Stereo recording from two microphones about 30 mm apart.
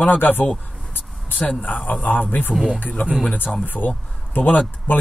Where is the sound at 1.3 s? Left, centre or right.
Left.